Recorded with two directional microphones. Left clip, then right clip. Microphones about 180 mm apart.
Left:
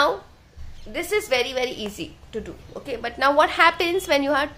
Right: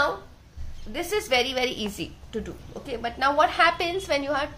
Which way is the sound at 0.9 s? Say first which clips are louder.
Left 2 dB; 20° left (ahead or behind).